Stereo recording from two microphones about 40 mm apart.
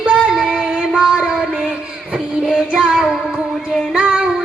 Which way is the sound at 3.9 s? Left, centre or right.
Right.